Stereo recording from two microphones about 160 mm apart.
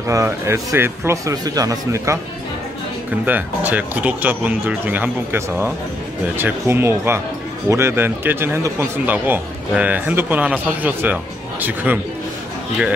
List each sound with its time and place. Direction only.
0.1 s speech: 20° right (ahead or behind)
3.3 s speech: 10° right (ahead or behind)